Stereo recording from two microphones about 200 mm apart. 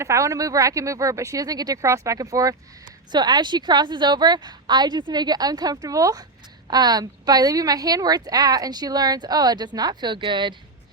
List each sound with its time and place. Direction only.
0.0 s a woman's voice: 15° right (ahead or behind)